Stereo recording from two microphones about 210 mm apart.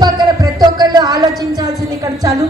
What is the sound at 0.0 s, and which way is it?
Music, 15° right (ahead or behind).